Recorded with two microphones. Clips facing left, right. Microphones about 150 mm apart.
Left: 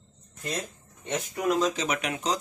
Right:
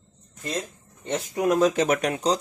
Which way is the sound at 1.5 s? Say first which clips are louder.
Right 5 dB; 50° right (ahead or behind).